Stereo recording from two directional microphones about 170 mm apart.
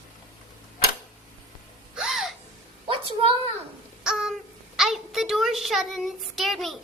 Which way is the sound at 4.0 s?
5° right (ahead or behind).